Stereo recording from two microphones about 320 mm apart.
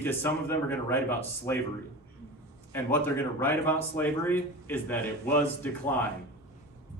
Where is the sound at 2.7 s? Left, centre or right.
Centre.